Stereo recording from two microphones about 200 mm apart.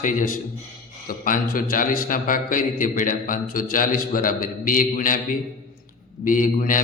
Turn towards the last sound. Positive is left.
turn(degrees=40)  # may be behind; listen again after turning